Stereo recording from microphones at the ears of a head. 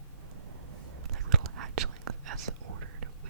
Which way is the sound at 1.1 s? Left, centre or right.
Right.